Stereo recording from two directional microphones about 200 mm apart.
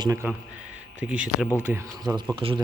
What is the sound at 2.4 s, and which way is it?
Speech, 25° right (ahead or behind).